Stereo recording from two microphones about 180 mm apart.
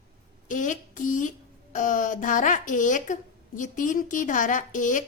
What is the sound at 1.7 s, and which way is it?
A woman's voice, 45° left (ahead or behind).